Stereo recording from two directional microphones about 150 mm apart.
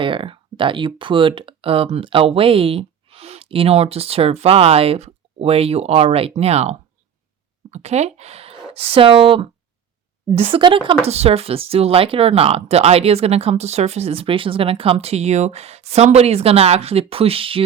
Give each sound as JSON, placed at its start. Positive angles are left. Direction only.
{"t": 0.0, "sound": "speech", "side_deg": -35}